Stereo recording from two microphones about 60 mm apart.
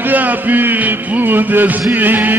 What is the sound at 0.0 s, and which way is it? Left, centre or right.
Music, right.